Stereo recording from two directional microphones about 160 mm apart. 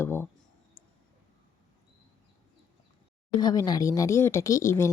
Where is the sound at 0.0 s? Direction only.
15° left (ahead or behind).